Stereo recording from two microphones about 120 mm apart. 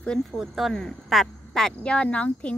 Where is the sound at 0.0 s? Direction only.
5° left (ahead or behind).